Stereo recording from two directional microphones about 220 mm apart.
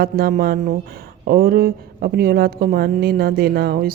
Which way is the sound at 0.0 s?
40° right (ahead or behind).